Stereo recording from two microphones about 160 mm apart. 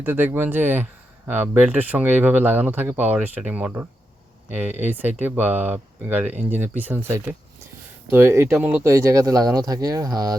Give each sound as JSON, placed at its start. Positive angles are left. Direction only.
{"t": 0.0, "sound": "speech", "side_deg": -10}